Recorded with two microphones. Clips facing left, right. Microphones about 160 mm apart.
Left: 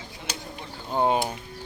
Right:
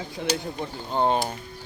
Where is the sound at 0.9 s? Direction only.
10° left (ahead or behind).